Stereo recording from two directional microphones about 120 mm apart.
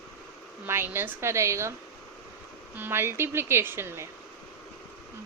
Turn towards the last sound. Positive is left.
turn(degrees=-20)  # may be behind; listen again after turning